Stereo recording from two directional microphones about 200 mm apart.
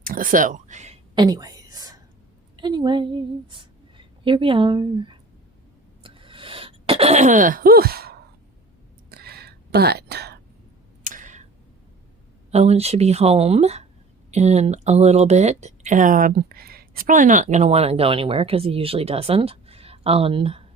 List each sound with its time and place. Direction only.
0.0 s speech: 45° right (ahead or behind)
1.1 s whispering: 20° right (ahead or behind)
2.6 s a woman's voice: 20° right (ahead or behind)
6.0 s throat clearing: 25° right (ahead or behind); by 8.2 s 50° right (ahead or behind)
9.0 s whispering: 50° right (ahead or behind)
11.0 s tick: 40° right (ahead or behind)
12.5 s speech: 30° right (ahead or behind)